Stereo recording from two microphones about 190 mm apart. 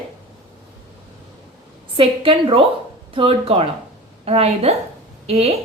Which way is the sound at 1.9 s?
30° right (ahead or behind).